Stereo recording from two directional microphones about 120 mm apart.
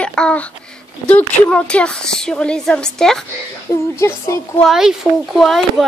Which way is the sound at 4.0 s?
25° left (ahead or behind).